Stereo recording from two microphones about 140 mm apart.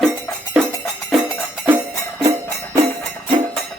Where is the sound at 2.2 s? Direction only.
25° right (ahead or behind).